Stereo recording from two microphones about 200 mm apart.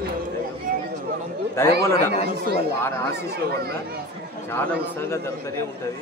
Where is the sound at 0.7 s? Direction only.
40° right (ahead or behind).